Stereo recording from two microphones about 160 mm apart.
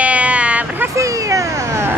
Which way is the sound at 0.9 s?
20° right (ahead or behind).